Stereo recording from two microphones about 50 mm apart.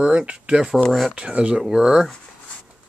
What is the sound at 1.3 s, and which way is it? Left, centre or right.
Speech, right.